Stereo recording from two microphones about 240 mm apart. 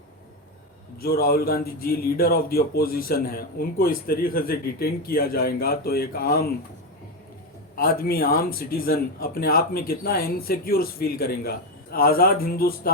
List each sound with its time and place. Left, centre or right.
0.9 s a man's voice: left
7.8 s a man's voice: left